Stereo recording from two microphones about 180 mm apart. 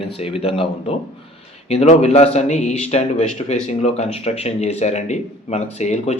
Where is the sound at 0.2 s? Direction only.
35° left (ahead or behind).